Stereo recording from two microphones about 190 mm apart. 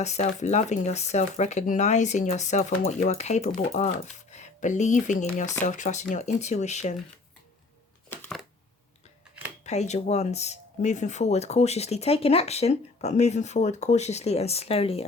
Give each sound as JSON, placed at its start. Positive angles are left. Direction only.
{"t": 0.0, "sound": "speech", "side_deg": 35}
{"t": 8.1, "sound": "a sound", "side_deg": 10}
{"t": 9.6, "sound": "speech", "side_deg": 35}